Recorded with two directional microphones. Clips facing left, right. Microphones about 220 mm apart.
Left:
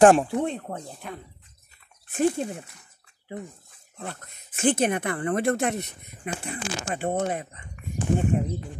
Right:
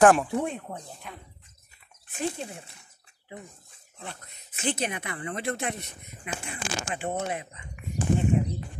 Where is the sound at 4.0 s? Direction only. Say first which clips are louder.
Left 5 dB; 50° left (ahead or behind).